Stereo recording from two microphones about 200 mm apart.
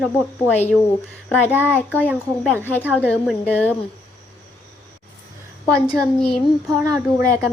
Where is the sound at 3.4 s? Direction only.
5° left (ahead or behind).